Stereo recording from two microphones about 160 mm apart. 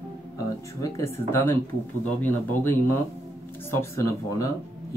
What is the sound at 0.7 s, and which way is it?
Speech, 20° left (ahead or behind).